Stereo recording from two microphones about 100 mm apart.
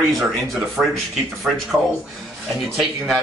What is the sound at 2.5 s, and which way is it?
Speech, centre (ahead or behind).